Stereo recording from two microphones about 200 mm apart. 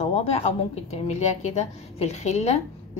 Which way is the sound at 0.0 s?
30° left (ahead or behind).